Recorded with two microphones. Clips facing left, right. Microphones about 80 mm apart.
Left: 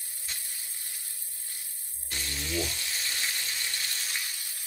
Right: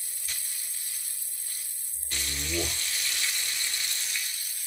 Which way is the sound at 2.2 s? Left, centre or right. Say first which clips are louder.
Even; centre.